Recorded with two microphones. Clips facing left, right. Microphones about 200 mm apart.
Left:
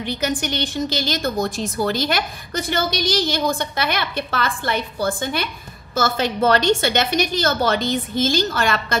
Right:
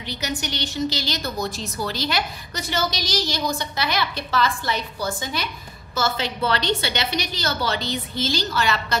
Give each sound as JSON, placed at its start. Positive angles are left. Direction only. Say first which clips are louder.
{"t": 0.0, "sound": "a woman's voice", "louder": "left 6 dB", "side_deg": 50}